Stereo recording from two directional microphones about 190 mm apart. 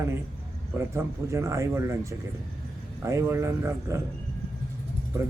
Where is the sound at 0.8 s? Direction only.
15° right (ahead or behind).